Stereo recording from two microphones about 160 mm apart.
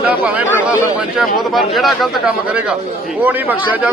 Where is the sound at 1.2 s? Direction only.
Centre (ahead or behind).